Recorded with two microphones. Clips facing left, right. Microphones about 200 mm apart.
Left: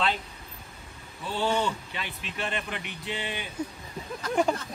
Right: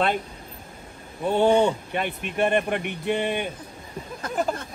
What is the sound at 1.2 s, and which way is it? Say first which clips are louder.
Speech: right 9 dB; 55° right (ahead or behind).